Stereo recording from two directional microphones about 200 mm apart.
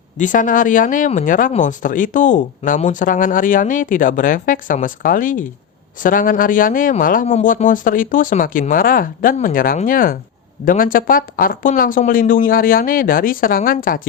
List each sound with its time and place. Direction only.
0.2 s speech: 40° left (ahead or behind)